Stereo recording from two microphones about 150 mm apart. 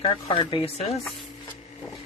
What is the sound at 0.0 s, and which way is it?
Speech, 35° left (ahead or behind).